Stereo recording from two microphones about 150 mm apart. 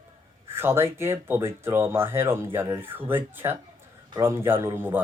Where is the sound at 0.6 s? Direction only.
15° right (ahead or behind).